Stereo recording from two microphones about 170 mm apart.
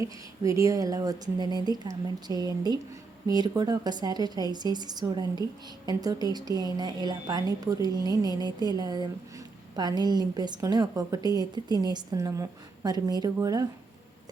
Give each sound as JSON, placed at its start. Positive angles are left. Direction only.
{"t": 0.0, "sound": "a woman's voice", "side_deg": -20}